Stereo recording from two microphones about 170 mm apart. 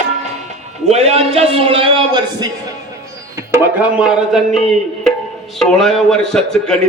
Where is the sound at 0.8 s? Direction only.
40° right (ahead or behind).